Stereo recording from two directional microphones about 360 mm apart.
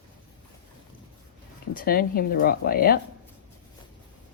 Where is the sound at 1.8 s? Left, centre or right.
Left.